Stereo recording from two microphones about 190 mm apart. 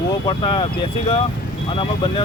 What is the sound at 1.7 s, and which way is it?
Speech, 25° left (ahead or behind).